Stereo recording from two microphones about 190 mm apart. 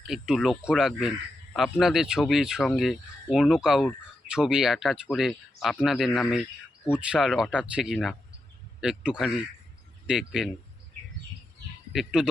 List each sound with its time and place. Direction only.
0.1 s speech: centre (ahead or behind)
11.9 s speech: 5° right (ahead or behind)